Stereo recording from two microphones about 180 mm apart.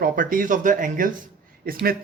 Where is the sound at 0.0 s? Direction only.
50° right (ahead or behind).